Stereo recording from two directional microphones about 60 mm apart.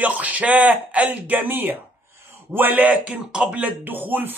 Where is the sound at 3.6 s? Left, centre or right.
Right.